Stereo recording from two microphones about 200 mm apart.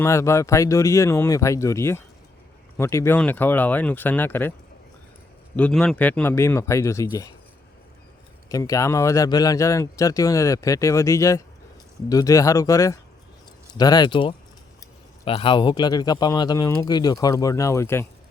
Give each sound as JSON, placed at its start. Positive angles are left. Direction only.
{"t": 0.0, "sound": "a man's voice", "side_deg": 15}
{"t": 5.5, "sound": "a man's voice", "side_deg": 5}
{"t": 8.4, "sound": "a man's voice", "side_deg": 15}